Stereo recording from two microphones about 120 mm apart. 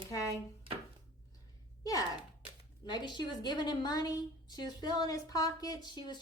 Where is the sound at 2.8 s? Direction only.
40° left (ahead or behind).